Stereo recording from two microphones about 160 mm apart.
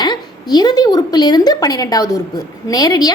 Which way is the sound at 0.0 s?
25° left (ahead or behind).